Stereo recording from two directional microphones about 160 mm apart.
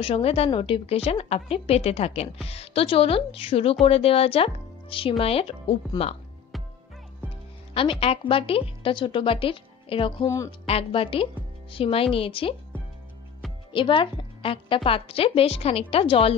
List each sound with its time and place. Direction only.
0.0 s a woman's voice: 40° left (ahead or behind)
7.7 s a woman's voice: 35° left (ahead or behind)
10.2 s speech: 20° left (ahead or behind)
10.7 s a woman's voice: 35° left (ahead or behind)
13.7 s a woman's voice: 30° left (ahead or behind)